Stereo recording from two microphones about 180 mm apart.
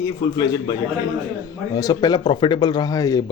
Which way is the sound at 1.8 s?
20° left (ahead or behind).